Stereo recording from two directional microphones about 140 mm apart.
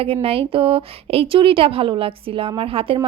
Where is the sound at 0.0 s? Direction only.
40° right (ahead or behind).